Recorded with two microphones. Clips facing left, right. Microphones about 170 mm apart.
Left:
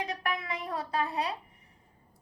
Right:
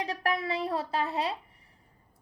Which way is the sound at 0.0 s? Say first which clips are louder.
Right 4 dB; 35° right (ahead or behind).